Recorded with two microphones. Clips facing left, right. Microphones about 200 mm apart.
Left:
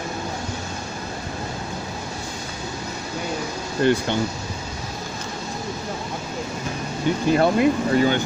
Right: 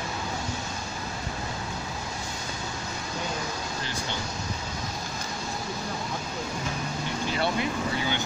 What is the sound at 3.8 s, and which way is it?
Speech, 60° left (ahead or behind).